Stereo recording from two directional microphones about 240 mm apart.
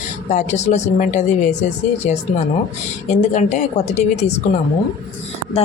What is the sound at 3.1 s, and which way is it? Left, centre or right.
Speech, left.